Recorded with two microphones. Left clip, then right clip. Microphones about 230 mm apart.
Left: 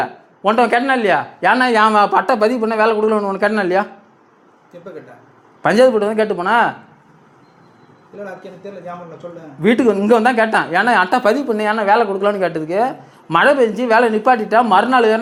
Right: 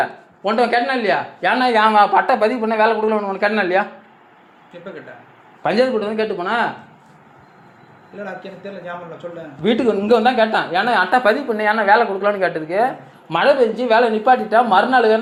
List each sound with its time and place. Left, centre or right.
0.0 s speech: left
5.6 s speech: left
8.2 s a man's voice: centre
9.6 s speech: left